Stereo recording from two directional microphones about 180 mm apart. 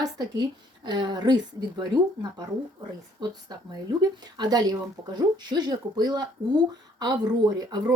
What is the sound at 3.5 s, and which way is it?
A woman's voice, 20° right (ahead or behind).